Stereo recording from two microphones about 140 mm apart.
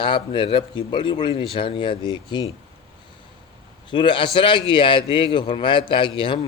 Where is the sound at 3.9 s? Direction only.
35° left (ahead or behind).